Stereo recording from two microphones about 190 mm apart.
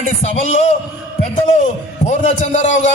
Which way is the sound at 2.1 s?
40° left (ahead or behind).